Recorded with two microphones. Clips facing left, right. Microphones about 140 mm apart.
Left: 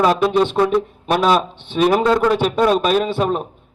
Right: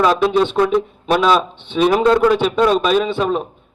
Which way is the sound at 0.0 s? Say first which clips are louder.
Right 1 dB; centre (ahead or behind).